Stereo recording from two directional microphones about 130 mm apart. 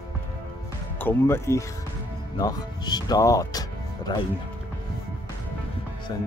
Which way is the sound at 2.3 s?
30° left (ahead or behind).